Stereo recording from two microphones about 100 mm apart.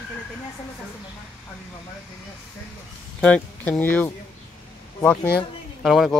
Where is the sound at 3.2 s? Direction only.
15° left (ahead or behind).